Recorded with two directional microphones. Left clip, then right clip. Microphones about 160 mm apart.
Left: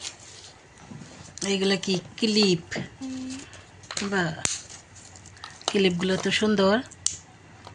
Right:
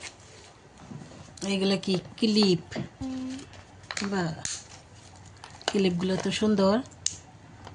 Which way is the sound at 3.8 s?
Centre (ahead or behind).